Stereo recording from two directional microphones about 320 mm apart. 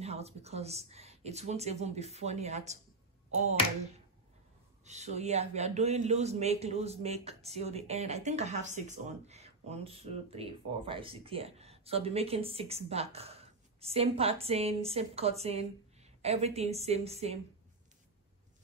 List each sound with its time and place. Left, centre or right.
0.0 s speech: centre
4.8 s speech: right